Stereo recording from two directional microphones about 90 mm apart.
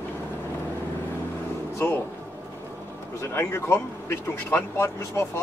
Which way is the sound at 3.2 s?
30° left (ahead or behind).